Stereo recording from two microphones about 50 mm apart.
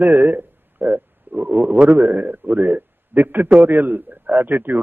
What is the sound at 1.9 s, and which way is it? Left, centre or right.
A man's voice, right.